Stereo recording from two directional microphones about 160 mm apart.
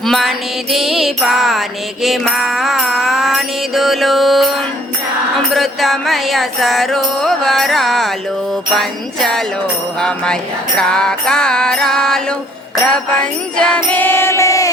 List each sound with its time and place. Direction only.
0.0 s music: centre (ahead or behind)
5.5 s music: centre (ahead or behind); by 14.7 s 20° left (ahead or behind)